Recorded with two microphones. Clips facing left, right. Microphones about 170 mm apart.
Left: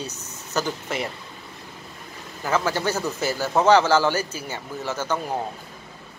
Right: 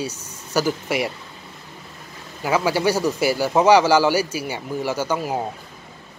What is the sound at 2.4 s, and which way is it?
Speech, 10° right (ahead or behind).